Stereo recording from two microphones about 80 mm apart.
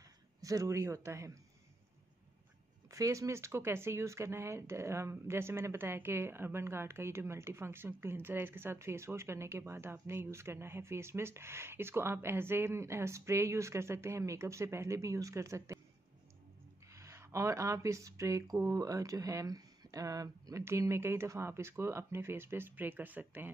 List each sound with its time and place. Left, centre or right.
0.4 s speech: right
2.9 s speech: right
16.9 s speech: right
20.6 s speech: right